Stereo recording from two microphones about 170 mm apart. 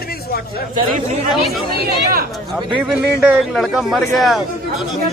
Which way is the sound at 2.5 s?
5° right (ahead or behind).